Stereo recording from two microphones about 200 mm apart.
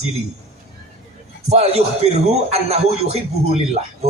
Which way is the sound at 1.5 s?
30° right (ahead or behind).